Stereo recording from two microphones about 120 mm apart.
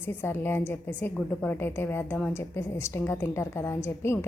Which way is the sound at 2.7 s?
20° left (ahead or behind).